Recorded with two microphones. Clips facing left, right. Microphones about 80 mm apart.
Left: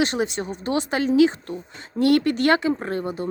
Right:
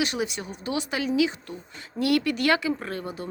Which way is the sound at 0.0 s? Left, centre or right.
Left.